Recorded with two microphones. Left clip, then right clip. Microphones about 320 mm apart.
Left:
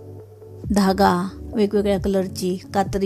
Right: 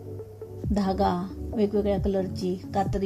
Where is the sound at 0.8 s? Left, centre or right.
Left.